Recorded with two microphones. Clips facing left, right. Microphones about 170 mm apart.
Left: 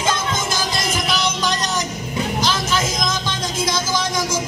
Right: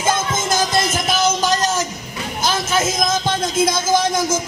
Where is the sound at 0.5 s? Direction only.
45° right (ahead or behind).